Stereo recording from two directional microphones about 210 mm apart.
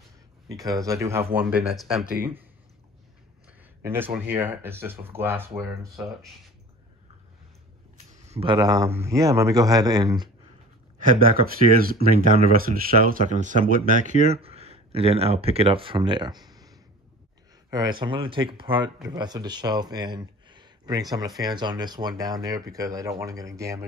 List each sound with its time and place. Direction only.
0.5 s speech: 15° right (ahead or behind); by 2.0 s centre (ahead or behind)
3.8 s speech: 10° right (ahead or behind)
8.1 s speech: 30° right (ahead or behind)
11.0 s speech: 40° right (ahead or behind); by 23.9 s 15° right (ahead or behind)